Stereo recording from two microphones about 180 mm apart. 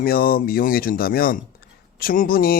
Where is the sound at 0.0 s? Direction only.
55° left (ahead or behind).